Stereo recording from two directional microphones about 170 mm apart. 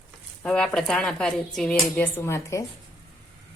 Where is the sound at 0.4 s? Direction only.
5° left (ahead or behind).